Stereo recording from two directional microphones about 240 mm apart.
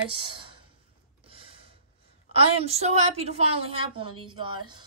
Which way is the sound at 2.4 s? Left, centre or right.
Right.